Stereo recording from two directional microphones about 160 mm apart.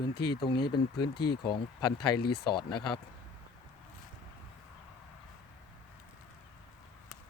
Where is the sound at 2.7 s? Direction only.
30° left (ahead or behind).